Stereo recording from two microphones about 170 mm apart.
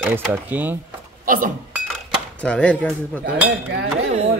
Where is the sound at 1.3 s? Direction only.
50° right (ahead or behind).